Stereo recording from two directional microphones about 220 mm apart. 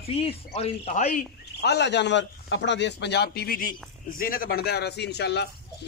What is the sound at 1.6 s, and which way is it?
A man's voice, 50° left (ahead or behind).